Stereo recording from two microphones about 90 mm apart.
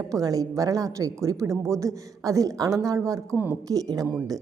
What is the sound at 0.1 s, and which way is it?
A woman's voice, 40° right (ahead or behind).